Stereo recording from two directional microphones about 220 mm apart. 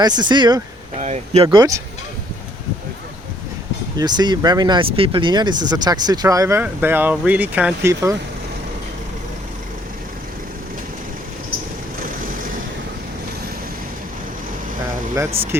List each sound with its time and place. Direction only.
0.0 s speech: 20° right (ahead or behind)
0.9 s speech: 30° right (ahead or behind)
1.5 s speech: 15° right (ahead or behind)
3.9 s speech: 20° right (ahead or behind)